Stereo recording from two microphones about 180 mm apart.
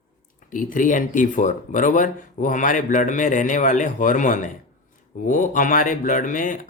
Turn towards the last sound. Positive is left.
turn(degrees=45)  # may be behind; listen again after turning